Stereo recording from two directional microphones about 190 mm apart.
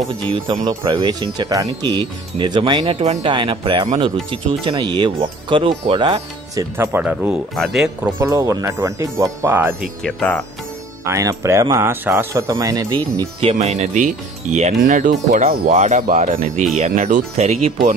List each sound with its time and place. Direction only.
0.7 s speech: 20° right (ahead or behind); by 8.1 s 5° right (ahead or behind)
8.2 s speech: 15° right (ahead or behind)
10.0 s speech: 5° left (ahead or behind)
11.1 s speech: 15° right (ahead or behind)
13.5 s speech: 35° right (ahead or behind)